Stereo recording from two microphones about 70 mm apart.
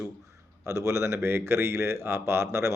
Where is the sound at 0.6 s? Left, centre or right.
Right.